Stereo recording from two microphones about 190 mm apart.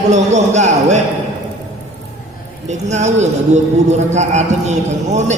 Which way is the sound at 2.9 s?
35° right (ahead or behind).